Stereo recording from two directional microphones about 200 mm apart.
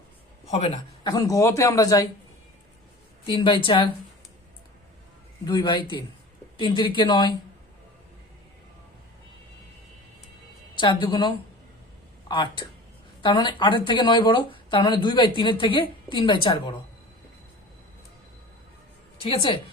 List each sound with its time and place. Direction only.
0.4 s a man's voice: 35° left (ahead or behind)
1.0 s speech: 20° left (ahead or behind)
3.2 s speech: 25° left (ahead or behind)
5.5 s speech: 20° left (ahead or behind)
10.8 s speech: 25° left (ahead or behind)
19.2 s speech: 25° left (ahead or behind)